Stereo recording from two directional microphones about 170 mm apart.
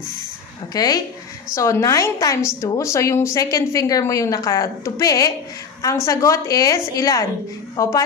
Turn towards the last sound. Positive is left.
turn(degrees=20)  # may be behind; listen again after turning